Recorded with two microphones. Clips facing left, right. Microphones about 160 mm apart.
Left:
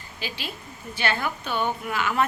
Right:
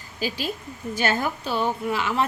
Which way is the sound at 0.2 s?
40° right (ahead or behind).